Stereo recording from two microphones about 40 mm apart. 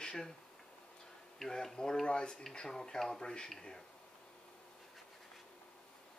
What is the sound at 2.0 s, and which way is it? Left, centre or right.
Speech, left.